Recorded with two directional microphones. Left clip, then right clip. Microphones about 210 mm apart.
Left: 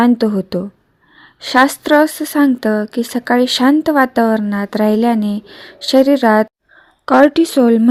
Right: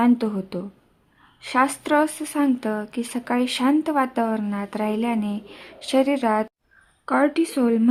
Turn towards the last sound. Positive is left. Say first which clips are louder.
# left 9 dB
turn(degrees=30)  # may be behind; listen again after turning